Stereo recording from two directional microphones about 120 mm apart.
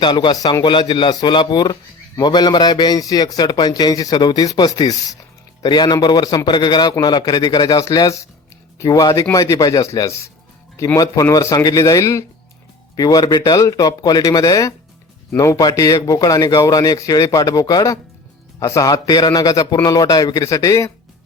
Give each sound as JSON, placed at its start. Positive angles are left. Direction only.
{"t": 0.0, "sound": "a man's voice", "side_deg": 40}